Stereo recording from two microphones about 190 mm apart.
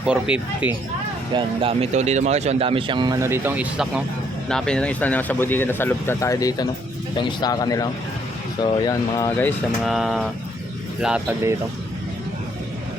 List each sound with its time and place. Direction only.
0.0 s speech: 5° right (ahead or behind)
1.3 s speech: 25° right (ahead or behind); by 9.9 s 10° left (ahead or behind)
9.9 s speech: centre (ahead or behind)